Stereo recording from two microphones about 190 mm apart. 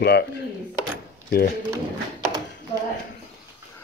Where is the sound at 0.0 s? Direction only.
60° left (ahead or behind).